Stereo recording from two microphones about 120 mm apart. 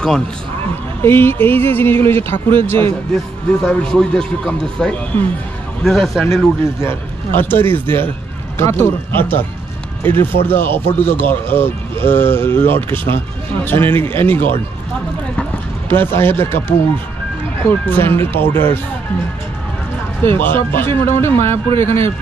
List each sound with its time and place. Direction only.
1.0 s speech: 20° left (ahead or behind)
3.6 s speech: 5° left (ahead or behind)
6.2 s speech: 20° left (ahead or behind)
15.9 s speech: 20° left (ahead or behind)
20.2 s speech: 20° left (ahead or behind)